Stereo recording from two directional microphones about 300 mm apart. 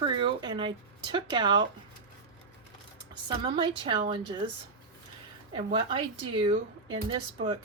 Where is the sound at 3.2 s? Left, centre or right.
Centre.